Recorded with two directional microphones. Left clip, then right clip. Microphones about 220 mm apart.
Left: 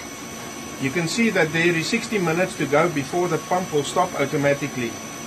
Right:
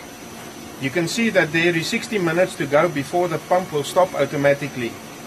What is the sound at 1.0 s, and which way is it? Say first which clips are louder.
Speech: right 2 dB; 45° right (ahead or behind).